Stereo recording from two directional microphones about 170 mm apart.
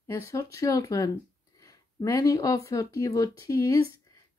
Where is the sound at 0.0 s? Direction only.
20° left (ahead or behind).